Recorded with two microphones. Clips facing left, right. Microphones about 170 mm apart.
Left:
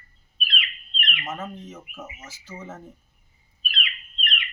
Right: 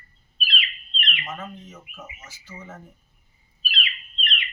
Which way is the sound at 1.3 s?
20° left (ahead or behind).